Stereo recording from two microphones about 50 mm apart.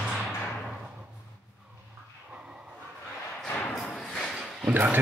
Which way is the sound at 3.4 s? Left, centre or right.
Left.